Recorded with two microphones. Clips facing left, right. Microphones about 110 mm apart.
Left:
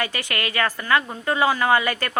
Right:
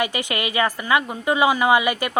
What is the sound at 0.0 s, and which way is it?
A woman's voice, 15° right (ahead or behind).